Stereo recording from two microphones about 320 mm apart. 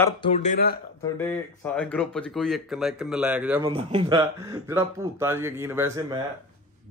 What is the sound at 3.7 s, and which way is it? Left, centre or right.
Speech, centre.